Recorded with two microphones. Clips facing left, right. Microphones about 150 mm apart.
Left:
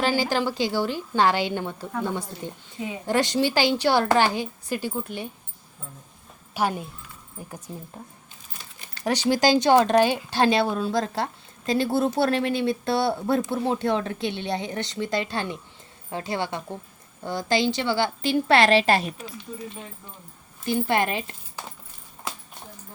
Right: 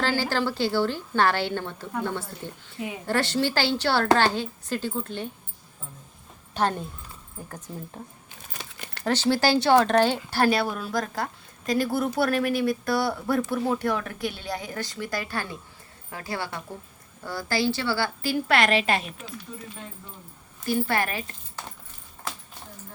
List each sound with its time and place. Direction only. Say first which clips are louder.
0.0 s a woman's voice: left 2 dB; 15° left (ahead or behind)
6.5 s speech: even; 10° left (ahead or behind)
8.0 s speech: right 1 dB; centre (ahead or behind)
8.5 s crumpling: right 5 dB; 70° right (ahead or behind)
9.0 s speech: left 2 dB; 15° left (ahead or behind); by 19.1 s 35° left (ahead or behind)
20.7 s speech: left 2 dB; 20° left (ahead or behind)